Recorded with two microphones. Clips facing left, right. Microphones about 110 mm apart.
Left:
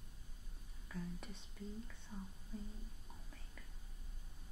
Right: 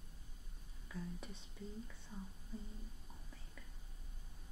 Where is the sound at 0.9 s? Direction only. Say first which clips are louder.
Even; 5° right (ahead or behind).